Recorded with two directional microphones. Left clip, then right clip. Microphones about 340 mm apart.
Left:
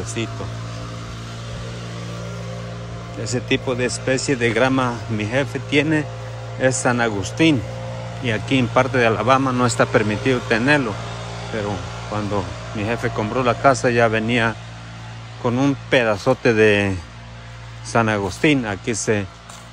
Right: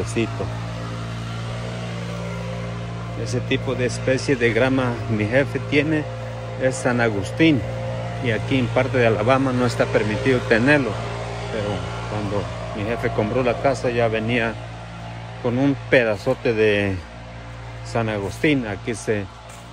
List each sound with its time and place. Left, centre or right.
0.2 s speech: centre
3.3 s speech: centre
11.0 s a sound: right
12.8 s speech: centre
17.9 s speech: centre